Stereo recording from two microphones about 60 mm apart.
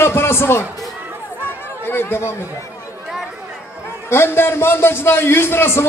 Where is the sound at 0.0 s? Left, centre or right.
Left.